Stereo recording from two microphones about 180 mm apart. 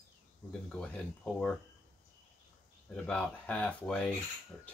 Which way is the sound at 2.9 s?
5° left (ahead or behind).